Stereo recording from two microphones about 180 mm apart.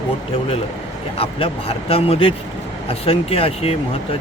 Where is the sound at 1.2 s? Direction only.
30° left (ahead or behind).